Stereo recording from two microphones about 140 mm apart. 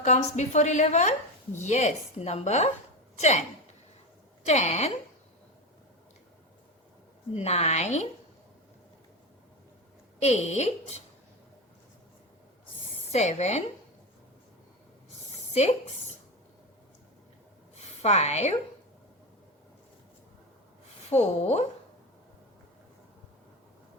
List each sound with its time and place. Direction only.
0.0 s a woman's voice: 55° left (ahead or behind)
4.4 s speech: 50° left (ahead or behind)
7.3 s speech: 50° left (ahead or behind)
10.2 s speech: 50° left (ahead or behind)
13.1 s speech: 50° left (ahead or behind)
17.7 s a woman's voice: 50° left (ahead or behind)
21.1 s speech: 50° left (ahead or behind)